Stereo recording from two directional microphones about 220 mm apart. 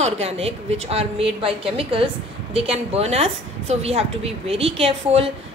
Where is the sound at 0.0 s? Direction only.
30° right (ahead or behind).